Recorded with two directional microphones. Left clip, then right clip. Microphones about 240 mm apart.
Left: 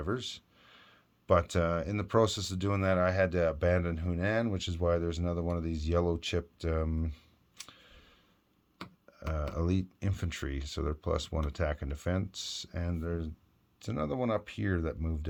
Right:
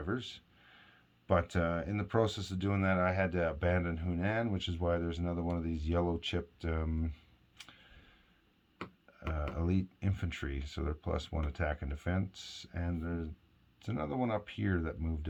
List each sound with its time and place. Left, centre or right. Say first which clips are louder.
0.0 s speech: left 3 dB; left
9.6 s speech: left 3 dB; left